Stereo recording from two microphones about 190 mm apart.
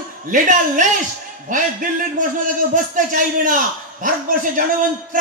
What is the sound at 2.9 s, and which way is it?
Speech, 45° right (ahead or behind).